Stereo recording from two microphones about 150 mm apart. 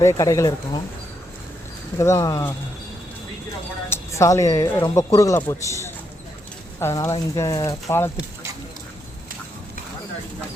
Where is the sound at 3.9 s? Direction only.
20° left (ahead or behind).